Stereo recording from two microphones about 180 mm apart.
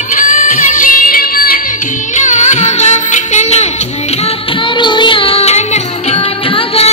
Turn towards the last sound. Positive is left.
turn(degrees=40)  # may be behind; listen again after turning